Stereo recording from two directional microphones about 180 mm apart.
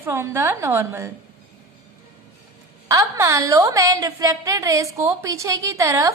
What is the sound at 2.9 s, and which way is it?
A woman's voice, 15° right (ahead or behind).